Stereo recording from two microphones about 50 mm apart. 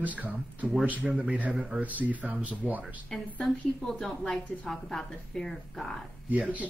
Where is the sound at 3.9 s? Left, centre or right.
Centre.